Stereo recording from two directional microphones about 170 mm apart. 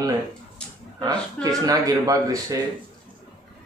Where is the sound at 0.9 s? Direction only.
20° right (ahead or behind).